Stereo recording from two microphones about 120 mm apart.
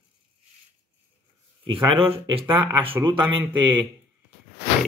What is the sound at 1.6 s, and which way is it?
Speech, 45° right (ahead or behind).